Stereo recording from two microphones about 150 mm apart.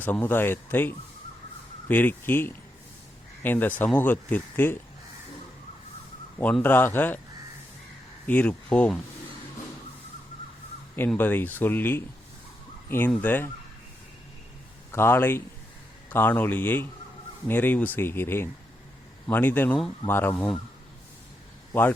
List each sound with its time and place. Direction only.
0.0 s speech: 10° left (ahead or behind)
6.4 s speech: 10° left (ahead or behind)
8.3 s speech: 10° left (ahead or behind)
11.1 s speech: 15° left (ahead or behind)
13.1 s speech: 10° left (ahead or behind)
14.9 s speech: 15° left (ahead or behind)
21.7 s a man's voice: 15° left (ahead or behind)